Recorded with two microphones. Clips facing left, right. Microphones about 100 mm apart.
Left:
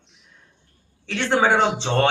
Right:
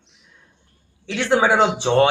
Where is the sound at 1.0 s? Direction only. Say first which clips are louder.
Right 2 dB; 15° right (ahead or behind).